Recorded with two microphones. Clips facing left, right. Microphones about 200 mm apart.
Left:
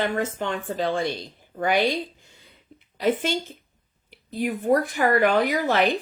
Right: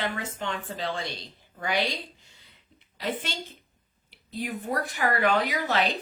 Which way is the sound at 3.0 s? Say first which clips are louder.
Left 9 dB; 50° left (ahead or behind).